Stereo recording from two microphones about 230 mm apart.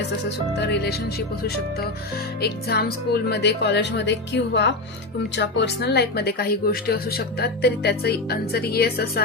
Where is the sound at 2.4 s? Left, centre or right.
Left.